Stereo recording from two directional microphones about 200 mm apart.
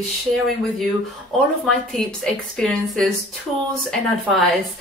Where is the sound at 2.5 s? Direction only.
5° left (ahead or behind).